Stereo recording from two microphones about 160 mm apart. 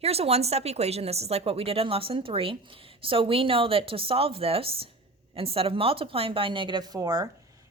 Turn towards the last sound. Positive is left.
turn(degrees=-20)  # may be behind; listen again after turning